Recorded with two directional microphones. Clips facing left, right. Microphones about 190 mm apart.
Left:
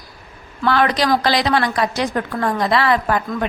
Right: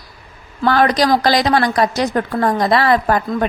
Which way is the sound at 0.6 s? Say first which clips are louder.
Right 3 dB; 40° right (ahead or behind).